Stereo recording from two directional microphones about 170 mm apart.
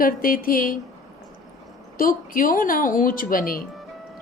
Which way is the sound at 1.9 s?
55° left (ahead or behind).